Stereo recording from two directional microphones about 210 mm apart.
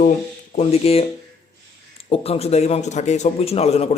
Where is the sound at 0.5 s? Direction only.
30° left (ahead or behind).